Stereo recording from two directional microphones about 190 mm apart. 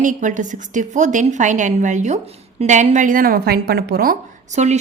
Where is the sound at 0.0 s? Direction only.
40° right (ahead or behind).